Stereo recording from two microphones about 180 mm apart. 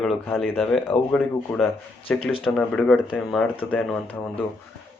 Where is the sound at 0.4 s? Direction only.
5° left (ahead or behind).